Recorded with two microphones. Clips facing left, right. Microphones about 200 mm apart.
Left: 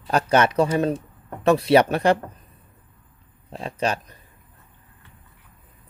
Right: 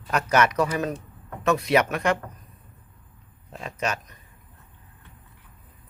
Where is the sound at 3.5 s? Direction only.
30° left (ahead or behind).